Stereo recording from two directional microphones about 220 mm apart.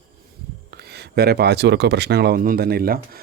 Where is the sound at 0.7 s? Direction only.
45° right (ahead or behind).